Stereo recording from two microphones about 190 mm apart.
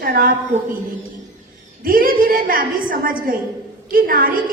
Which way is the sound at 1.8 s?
50° right (ahead or behind).